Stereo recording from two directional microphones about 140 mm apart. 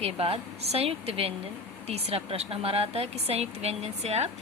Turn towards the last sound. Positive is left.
turn(degrees=-50)  # may be behind; listen again after turning